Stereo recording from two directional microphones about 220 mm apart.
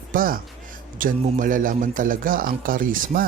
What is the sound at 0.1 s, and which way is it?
Speech, 40° right (ahead or behind).